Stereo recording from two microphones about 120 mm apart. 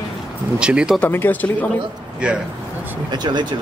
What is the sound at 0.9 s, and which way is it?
Speech, 15° left (ahead or behind).